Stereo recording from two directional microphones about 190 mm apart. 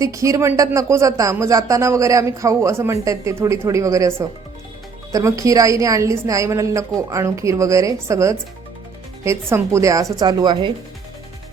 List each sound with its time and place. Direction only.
0.0 s speech: 15° right (ahead or behind)